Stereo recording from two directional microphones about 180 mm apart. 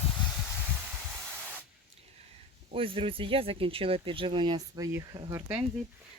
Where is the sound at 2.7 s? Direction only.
30° right (ahead or behind); by 5.6 s 10° right (ahead or behind).